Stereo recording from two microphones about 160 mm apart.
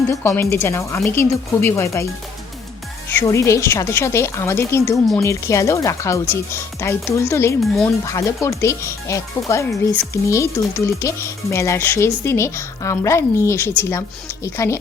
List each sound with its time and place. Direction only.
0.1 s speech: 15° left (ahead or behind)
3.2 s speech: 20° left (ahead or behind)